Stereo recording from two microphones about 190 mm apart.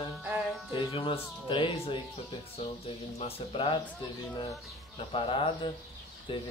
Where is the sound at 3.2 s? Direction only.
30° left (ahead or behind).